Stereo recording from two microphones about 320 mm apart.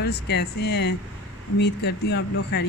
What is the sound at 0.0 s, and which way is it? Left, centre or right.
Speech, left.